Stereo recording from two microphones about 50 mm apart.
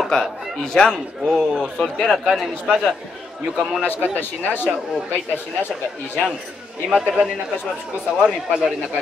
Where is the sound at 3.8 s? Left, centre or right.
Left.